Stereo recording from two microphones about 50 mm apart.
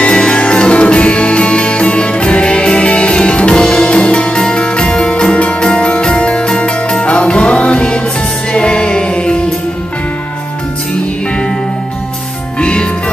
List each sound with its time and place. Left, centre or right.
0.0 s music: left
12.5 s music: left